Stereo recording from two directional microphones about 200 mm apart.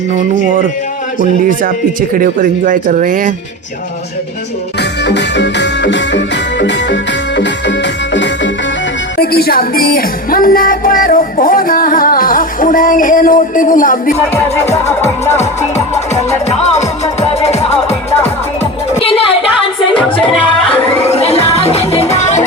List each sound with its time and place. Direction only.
1.2 s speech: 45° right (ahead or behind)
4.8 s music: 60° left (ahead or behind)
9.1 s music: 50° left (ahead or behind)
14.3 s speech: 10° left (ahead or behind)
16.7 s music: 35° left (ahead or behind)
17.8 s music: 10° left (ahead or behind)
18.9 s a sound: 30° left (ahead or behind)
19.9 s music: 5° left (ahead or behind)
21.0 s music: 30° left (ahead or behind)